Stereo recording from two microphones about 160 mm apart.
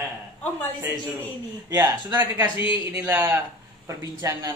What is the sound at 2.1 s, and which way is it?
A man's voice, 15° right (ahead or behind).